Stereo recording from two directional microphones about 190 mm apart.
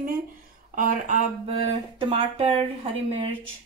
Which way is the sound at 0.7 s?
45° right (ahead or behind).